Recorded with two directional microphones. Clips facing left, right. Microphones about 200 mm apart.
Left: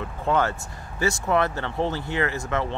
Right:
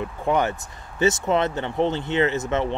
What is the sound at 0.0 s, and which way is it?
Speech, 15° right (ahead or behind).